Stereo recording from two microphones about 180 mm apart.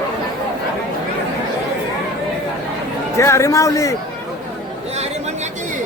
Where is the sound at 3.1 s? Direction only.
15° left (ahead or behind).